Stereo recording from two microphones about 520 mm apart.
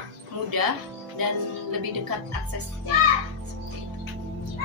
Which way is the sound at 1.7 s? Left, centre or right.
Right.